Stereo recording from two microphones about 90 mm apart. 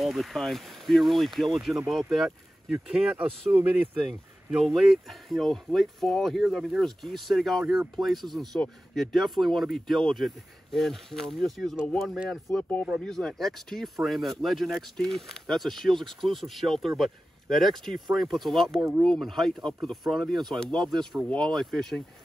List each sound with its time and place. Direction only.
0.0 s speech: centre (ahead or behind); by 3.9 s 20° right (ahead or behind)
4.5 s speech: 5° right (ahead or behind)